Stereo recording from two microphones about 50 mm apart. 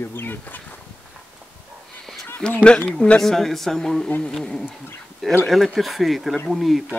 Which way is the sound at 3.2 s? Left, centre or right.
Centre.